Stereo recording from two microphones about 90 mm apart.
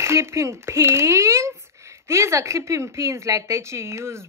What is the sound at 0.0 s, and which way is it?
Speech, 30° right (ahead or behind).